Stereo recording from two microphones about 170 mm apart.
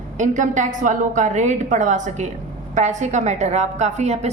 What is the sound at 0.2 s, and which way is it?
A woman's voice, 45° right (ahead or behind).